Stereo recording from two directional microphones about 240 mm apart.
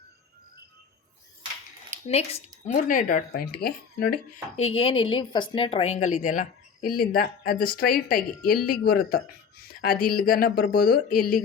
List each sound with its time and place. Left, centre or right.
2.0 s speech: left
4.5 s speech: left